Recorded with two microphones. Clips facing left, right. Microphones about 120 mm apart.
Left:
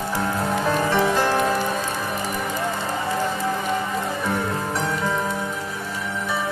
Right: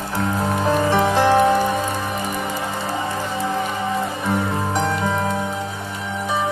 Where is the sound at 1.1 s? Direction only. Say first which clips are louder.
Right 5 dB; 25° right (ahead or behind).